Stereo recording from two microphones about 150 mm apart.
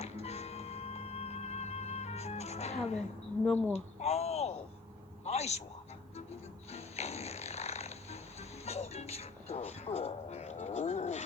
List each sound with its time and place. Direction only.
0.0 s music: 45° left (ahead or behind)
3.7 s a sound: 45° left (ahead or behind)
6.7 s music: 45° left (ahead or behind)